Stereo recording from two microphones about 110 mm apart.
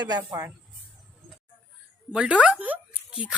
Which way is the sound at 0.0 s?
40° right (ahead or behind).